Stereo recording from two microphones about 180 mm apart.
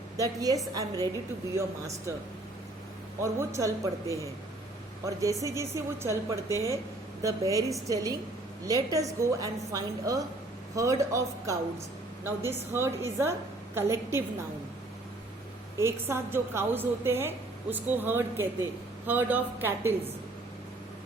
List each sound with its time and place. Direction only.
0.2 s a woman's voice: 20° right (ahead or behind)
3.2 s a woman's voice: 15° right (ahead or behind)
5.0 s a woman's voice: 20° right (ahead or behind)
15.8 s a woman's voice: 15° right (ahead or behind)